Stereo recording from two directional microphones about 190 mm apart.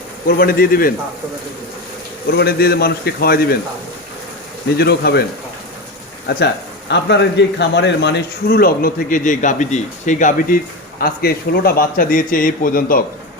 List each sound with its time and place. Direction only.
0.3 s speech: 50° left (ahead or behind)
2.3 s a man's voice: 60° left (ahead or behind)
4.8 s a man's voice: 55° left (ahead or behind)
6.2 s speech: 65° left (ahead or behind); by 13.0 s 50° left (ahead or behind)